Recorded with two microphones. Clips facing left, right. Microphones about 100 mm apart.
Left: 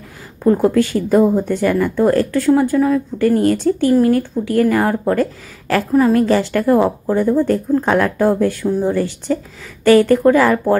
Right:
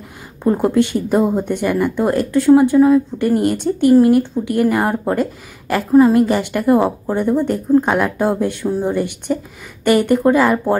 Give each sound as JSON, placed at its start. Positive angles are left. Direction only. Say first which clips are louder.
{"t": 0.4, "sound": "a woman's voice", "louder": "left 1 dB", "side_deg": -20}